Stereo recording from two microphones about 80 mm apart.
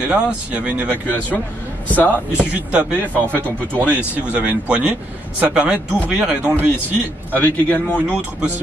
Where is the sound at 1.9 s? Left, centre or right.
Left.